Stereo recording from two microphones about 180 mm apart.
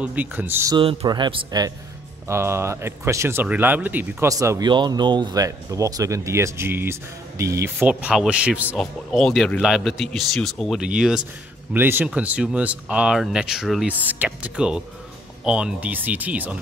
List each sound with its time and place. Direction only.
0.0 s speech: 10° right (ahead or behind)
0.7 s speech: 25° right (ahead or behind); by 16.5 s 10° right (ahead or behind)